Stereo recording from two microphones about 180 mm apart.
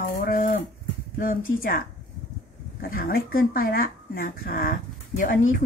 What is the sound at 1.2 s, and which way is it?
Speech, 50° left (ahead or behind).